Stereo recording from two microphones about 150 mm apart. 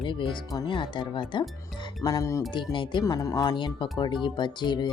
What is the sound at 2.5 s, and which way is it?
Speech, 30° left (ahead or behind).